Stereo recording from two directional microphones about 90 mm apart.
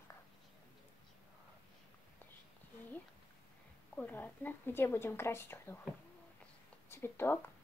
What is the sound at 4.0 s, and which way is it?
A woman's voice, 20° left (ahead or behind).